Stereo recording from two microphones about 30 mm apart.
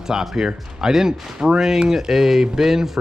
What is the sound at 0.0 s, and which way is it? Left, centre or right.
Speech, centre.